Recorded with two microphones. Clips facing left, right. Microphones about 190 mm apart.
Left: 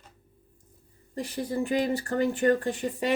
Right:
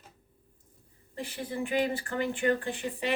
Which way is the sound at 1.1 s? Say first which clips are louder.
Left 5 dB; 40° left (ahead or behind).